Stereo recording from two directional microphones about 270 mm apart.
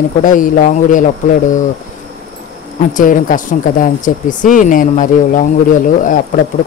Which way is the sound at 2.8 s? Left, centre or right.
Left.